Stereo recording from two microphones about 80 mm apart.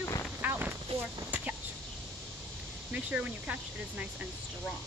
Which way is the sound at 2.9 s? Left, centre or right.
Centre.